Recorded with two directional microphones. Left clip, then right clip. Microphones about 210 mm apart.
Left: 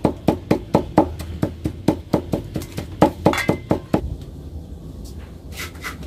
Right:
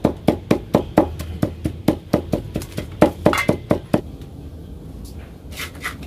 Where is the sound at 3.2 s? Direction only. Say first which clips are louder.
Right 1 dB; 15° right (ahead or behind).